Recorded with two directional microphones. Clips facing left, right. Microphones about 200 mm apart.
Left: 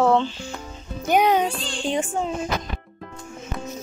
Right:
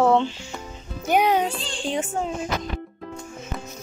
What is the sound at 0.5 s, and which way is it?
Speech, centre (ahead or behind).